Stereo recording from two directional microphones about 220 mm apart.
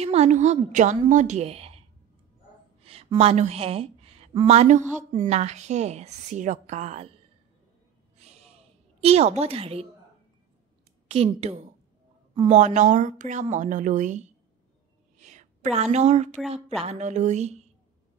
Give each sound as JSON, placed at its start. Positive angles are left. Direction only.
{"t": 0.0, "sound": "a woman's voice", "side_deg": -30}
{"t": 2.8, "sound": "a woman's voice", "side_deg": -25}
{"t": 8.2, "sound": "gasp", "side_deg": -30}
{"t": 9.0, "sound": "a woman's voice", "side_deg": -30}
{"t": 11.1, "sound": "a woman's voice", "side_deg": -25}
{"t": 15.2, "sound": "a woman's voice", "side_deg": -30}